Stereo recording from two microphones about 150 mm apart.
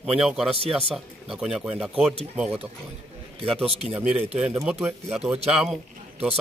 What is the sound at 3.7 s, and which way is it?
Speech, 40° right (ahead or behind).